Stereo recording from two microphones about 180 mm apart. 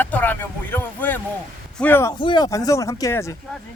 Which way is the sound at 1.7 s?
10° left (ahead or behind).